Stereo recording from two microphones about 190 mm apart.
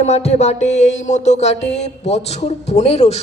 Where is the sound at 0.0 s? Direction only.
35° left (ahead or behind).